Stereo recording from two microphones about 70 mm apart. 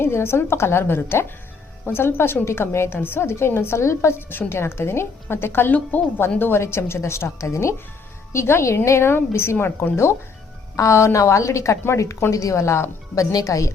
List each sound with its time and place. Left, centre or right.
0.0 s a woman's voice: left
13.1 s a woman's voice: left